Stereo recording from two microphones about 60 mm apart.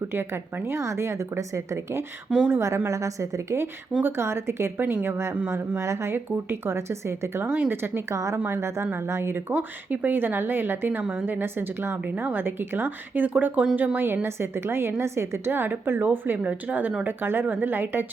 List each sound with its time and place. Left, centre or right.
0.1 s a woman's voice: right
0.8 s a woman's voice: right
4.0 s a woman's voice: right
5.8 s a woman's voice: right
8.1 s a woman's voice: right
8.4 s speech: right
9.5 s a woman's voice: right
14.3 s a woman's voice: right